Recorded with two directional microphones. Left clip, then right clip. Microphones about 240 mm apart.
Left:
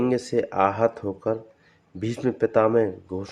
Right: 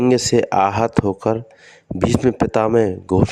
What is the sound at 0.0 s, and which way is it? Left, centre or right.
Speech, right.